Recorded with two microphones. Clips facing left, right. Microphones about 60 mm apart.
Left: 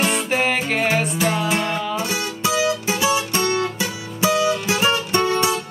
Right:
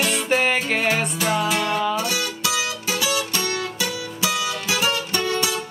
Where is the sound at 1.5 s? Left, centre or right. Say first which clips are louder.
Even; left.